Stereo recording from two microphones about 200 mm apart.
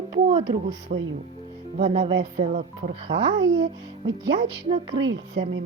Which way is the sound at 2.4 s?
35° right (ahead or behind).